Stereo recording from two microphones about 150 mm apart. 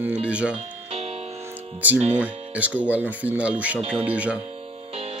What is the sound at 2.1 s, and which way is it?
Speech, 10° right (ahead or behind).